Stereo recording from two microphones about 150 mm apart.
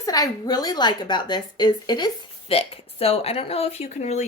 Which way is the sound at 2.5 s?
40° left (ahead or behind).